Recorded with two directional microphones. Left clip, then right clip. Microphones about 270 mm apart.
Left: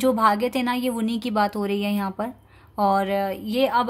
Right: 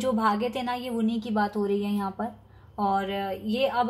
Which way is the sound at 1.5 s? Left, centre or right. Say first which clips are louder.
Left 2 dB; left.